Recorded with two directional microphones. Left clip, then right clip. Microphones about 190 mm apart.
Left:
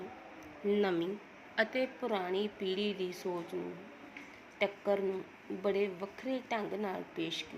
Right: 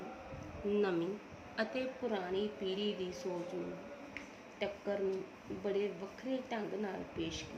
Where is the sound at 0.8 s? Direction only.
35° left (ahead or behind).